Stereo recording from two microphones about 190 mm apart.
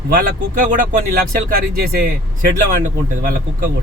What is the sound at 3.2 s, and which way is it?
Speech, 50° right (ahead or behind).